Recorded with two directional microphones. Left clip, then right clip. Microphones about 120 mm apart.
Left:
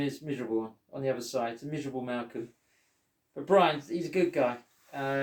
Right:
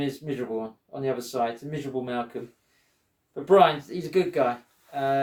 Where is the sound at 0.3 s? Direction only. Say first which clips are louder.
Right 2 dB; 35° right (ahead or behind).